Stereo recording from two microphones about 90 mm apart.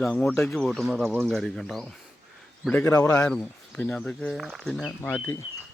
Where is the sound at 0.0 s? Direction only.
10° left (ahead or behind).